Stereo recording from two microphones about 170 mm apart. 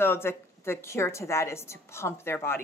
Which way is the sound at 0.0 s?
15° left (ahead or behind).